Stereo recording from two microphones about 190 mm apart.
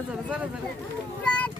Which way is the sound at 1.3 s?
5° left (ahead or behind).